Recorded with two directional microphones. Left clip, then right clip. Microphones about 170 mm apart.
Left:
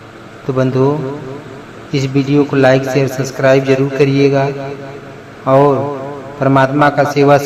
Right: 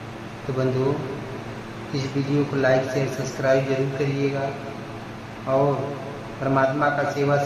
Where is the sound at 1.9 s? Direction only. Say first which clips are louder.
Left 12 dB; 50° left (ahead or behind).